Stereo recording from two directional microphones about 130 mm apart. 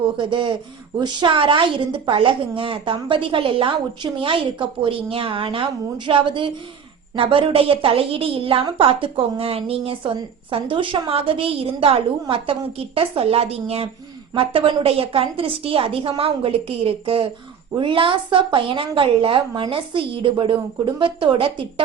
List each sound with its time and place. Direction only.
0.2 s a woman's voice: 40° right (ahead or behind)